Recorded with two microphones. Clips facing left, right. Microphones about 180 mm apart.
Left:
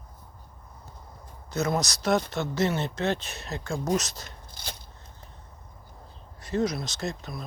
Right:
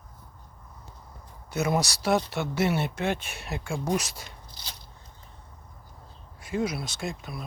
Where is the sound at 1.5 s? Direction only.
15° right (ahead or behind).